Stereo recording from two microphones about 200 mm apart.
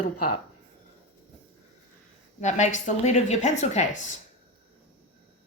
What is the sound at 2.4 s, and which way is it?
Speech, 35° left (ahead or behind).